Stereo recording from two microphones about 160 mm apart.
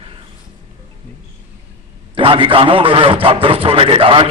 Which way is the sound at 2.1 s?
35° right (ahead or behind).